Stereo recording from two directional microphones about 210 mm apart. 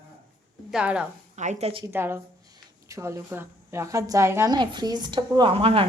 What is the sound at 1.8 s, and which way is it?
A woman's voice, 10° right (ahead or behind).